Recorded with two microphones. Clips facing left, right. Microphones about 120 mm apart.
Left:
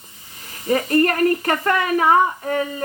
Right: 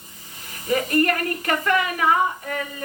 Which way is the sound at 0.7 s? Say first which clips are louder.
Left 3 dB; 35° left (ahead or behind).